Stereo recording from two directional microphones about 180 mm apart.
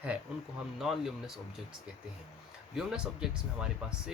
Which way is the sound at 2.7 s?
5° right (ahead or behind).